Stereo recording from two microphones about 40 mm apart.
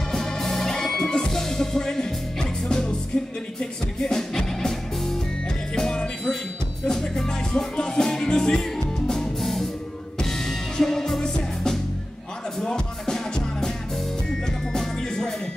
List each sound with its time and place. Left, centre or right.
0.1 s music: centre
4.0 s music: centre